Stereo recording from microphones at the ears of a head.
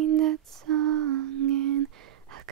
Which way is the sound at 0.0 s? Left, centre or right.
Right.